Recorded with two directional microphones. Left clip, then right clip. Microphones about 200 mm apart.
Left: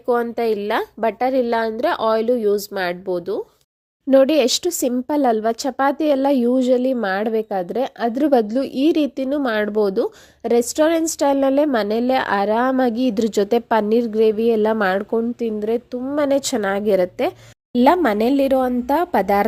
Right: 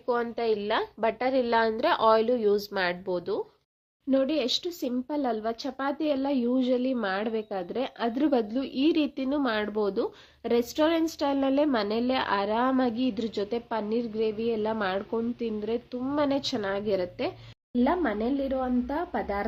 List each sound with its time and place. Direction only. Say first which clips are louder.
0.0 s a woman's voice: left 9 dB; 30° left (ahead or behind)
4.1 s speech: left 12 dB; 45° left (ahead or behind)
16.0 s a woman's voice: left 7 dB; 25° left (ahead or behind)
16.2 s a woman's voice: left 11 dB; 40° left (ahead or behind)
17.7 s speech: left 11 dB; 60° left (ahead or behind)